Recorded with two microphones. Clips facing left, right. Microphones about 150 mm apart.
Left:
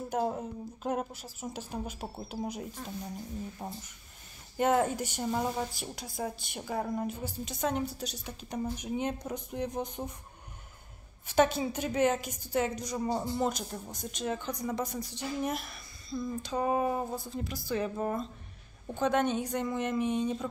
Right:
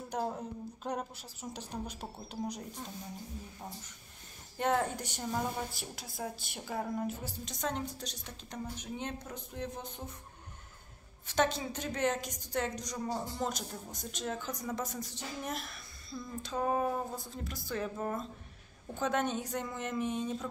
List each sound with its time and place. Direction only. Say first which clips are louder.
0.1 s a woman's voice: left 4 dB; 5° left (ahead or behind)
3.6 s speech: left 3 dB; 20° left (ahead or behind)
4.6 s a woman's voice: left 5 dB; 5° left (ahead or behind)
11.2 s a woman's voice: left 5 dB; 10° left (ahead or behind)